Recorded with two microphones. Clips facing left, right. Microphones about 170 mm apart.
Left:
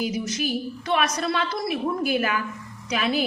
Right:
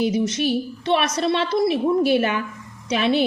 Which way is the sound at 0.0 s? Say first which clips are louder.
Right 6 dB; 30° right (ahead or behind).